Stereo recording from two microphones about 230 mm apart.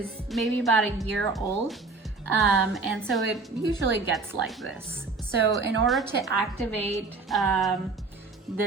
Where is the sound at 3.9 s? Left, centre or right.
Centre.